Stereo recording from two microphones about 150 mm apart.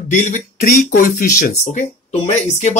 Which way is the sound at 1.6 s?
50° left (ahead or behind).